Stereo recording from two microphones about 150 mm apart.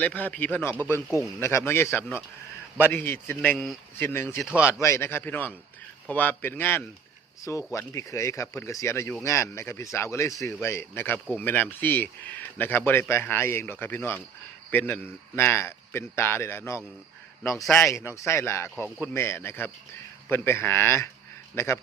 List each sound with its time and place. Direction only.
0.0 s speech: 10° left (ahead or behind)
4.4 s speech: 5° right (ahead or behind)
4.7 s speech: 20° left (ahead or behind)
18.8 s speech: 10° right (ahead or behind)
19.1 s a man's voice: 15° left (ahead or behind)